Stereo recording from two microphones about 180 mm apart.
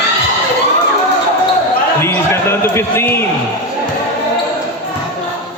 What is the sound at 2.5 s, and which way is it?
Speech, 15° left (ahead or behind).